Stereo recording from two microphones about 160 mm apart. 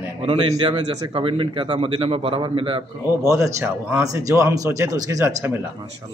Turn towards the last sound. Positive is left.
turn(degrees=-15)  # may be behind; listen again after turning